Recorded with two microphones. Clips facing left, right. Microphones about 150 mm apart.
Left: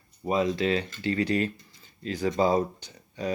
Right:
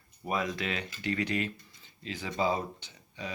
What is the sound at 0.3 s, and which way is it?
Speech, 25° left (ahead or behind).